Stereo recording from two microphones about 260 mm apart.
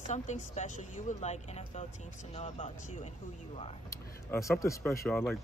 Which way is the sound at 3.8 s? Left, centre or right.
Centre.